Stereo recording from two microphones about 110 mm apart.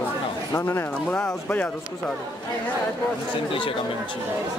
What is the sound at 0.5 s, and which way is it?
Speech, 20° left (ahead or behind).